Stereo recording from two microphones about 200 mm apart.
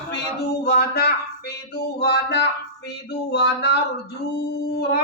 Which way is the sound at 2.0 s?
55° left (ahead or behind).